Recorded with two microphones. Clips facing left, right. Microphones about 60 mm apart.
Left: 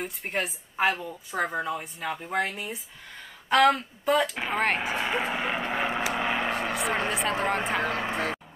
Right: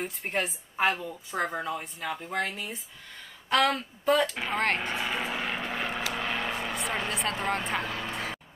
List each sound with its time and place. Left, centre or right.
0.0 s a woman's voice: centre
7.1 s a woman's voice: centre
7.8 s speech: left